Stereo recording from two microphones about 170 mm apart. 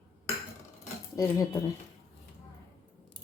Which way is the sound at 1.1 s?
20° left (ahead or behind).